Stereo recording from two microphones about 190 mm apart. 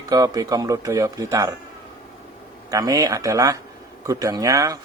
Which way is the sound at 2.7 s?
20° right (ahead or behind).